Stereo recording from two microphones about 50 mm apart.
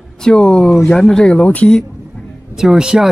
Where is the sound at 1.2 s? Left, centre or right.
Centre.